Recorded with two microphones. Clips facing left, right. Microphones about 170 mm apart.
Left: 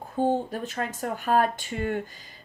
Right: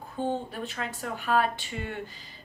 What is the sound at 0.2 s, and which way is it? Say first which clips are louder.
Speech: left 5 dB; 40° left (ahead or behind).